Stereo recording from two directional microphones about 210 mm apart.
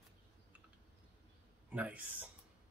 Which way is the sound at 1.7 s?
5° right (ahead or behind).